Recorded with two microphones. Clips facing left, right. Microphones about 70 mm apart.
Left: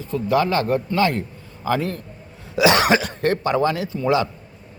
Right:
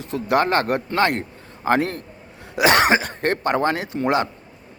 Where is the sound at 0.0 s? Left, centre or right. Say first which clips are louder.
Even; right.